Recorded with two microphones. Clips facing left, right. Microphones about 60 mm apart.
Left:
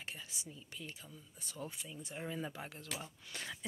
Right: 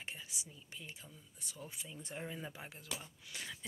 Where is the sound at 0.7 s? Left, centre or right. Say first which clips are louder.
Left 1 dB; centre.